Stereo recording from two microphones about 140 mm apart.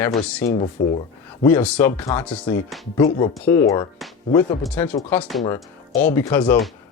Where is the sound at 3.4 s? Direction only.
20° left (ahead or behind).